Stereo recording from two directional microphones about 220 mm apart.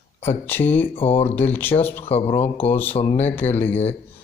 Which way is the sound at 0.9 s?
25° left (ahead or behind).